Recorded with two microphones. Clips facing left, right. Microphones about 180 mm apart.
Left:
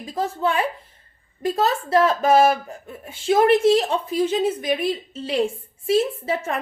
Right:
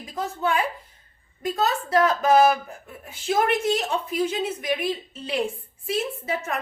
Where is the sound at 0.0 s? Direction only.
30° left (ahead or behind).